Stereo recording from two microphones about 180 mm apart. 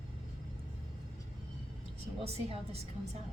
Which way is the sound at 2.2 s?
35° right (ahead or behind).